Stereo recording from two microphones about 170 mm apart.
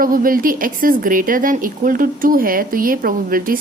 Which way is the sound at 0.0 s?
55° right (ahead or behind).